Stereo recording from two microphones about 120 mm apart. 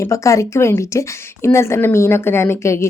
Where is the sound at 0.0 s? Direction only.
25° left (ahead or behind).